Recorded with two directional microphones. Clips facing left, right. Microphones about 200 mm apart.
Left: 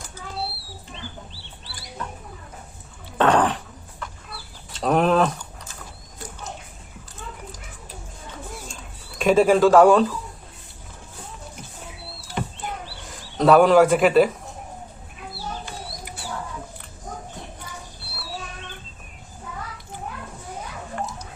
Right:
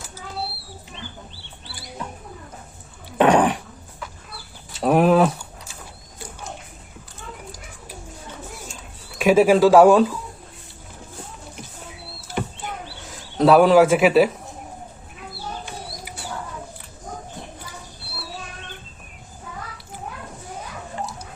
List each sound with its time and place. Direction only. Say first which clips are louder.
3.2 s a sound: right 3 dB; 15° right (ahead or behind)
4.0 s chicken: even; 5° right (ahead or behind)
4.7 s keys jangling: right 3 dB; 10° right (ahead or behind)
9.1 s speech: right 2 dB; 5° right (ahead or behind)
12.6 s bird: even; centre (ahead or behind)